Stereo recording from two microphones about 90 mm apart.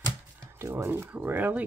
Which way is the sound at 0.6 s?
25° right (ahead or behind).